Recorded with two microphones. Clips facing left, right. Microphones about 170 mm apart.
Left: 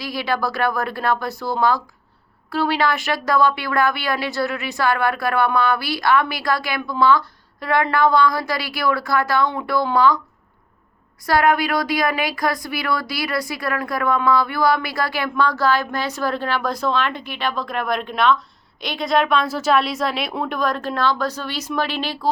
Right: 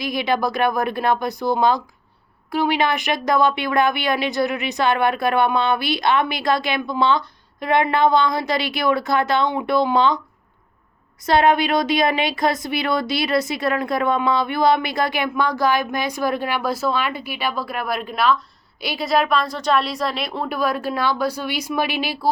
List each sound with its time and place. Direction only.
0.0 s speech: 20° right (ahead or behind)
11.3 s speech: 25° right (ahead or behind)